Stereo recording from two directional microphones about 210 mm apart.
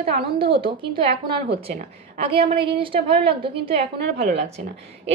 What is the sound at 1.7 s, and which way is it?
Speech, 40° right (ahead or behind).